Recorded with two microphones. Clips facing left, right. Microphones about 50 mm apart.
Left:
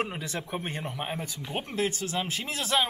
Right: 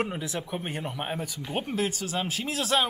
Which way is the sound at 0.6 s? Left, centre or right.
Centre.